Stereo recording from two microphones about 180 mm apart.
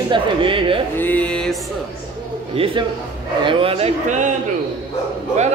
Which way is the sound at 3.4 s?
30° right (ahead or behind).